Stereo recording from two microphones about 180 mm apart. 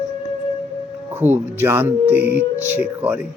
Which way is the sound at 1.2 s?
10° right (ahead or behind).